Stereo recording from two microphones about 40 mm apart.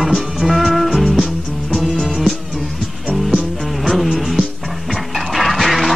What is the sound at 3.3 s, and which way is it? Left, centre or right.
Music, centre.